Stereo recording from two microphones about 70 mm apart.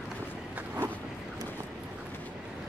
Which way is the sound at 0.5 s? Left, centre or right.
Right.